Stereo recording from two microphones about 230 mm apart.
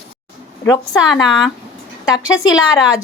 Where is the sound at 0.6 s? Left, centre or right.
Centre.